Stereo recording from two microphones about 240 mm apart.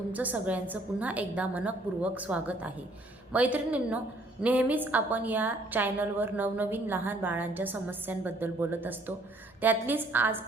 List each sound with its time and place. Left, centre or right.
0.1 s a woman's voice: centre